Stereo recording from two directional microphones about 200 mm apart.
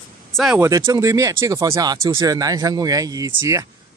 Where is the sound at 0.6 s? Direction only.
15° right (ahead or behind).